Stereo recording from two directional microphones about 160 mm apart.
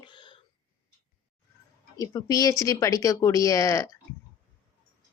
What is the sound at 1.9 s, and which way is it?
Speech, 20° left (ahead or behind).